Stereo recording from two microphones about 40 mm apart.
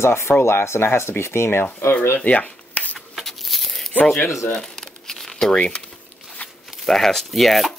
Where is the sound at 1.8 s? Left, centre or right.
Left.